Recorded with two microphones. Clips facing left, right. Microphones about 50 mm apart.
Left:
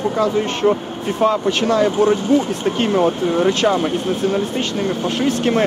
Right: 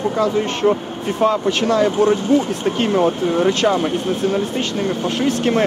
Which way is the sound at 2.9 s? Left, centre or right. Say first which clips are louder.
Even; centre.